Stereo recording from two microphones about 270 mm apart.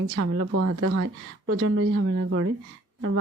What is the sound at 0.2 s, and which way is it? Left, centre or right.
Speech, right.